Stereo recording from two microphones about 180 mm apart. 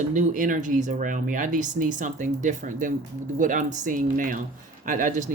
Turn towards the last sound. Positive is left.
turn(degrees=-45)  # may be behind; listen again after turning